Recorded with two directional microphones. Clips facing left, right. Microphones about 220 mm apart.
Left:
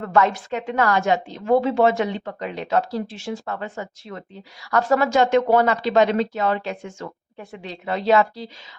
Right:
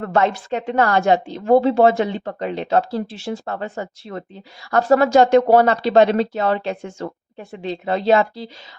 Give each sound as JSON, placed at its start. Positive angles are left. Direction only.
{"t": 0.1, "sound": "a woman's voice", "side_deg": -30}